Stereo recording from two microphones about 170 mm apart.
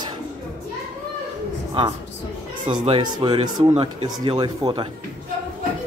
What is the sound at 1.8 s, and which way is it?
Speech, 30° right (ahead or behind).